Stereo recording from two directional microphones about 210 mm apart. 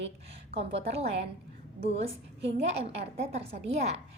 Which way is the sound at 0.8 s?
30° right (ahead or behind).